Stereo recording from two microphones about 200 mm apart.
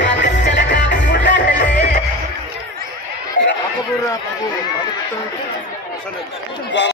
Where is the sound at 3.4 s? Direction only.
65° left (ahead or behind).